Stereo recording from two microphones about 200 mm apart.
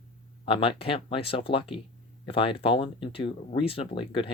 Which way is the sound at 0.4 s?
25° left (ahead or behind).